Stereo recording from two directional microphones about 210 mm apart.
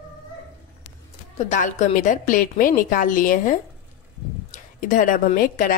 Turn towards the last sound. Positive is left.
turn(degrees=40)  # may be behind; listen again after turning